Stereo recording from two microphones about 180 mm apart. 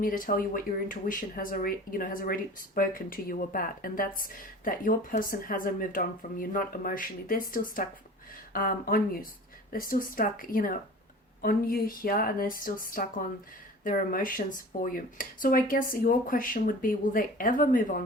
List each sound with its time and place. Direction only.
0.0 s speech: 50° left (ahead or behind)